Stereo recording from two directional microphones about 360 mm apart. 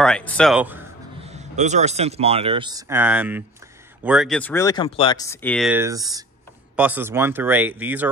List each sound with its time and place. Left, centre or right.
0.0 s speech: centre
1.2 s speech: centre